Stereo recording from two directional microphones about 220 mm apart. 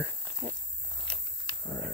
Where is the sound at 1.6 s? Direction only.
15° left (ahead or behind).